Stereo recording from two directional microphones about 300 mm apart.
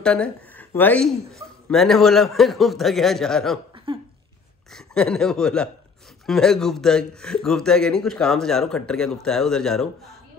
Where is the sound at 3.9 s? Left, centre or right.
Centre.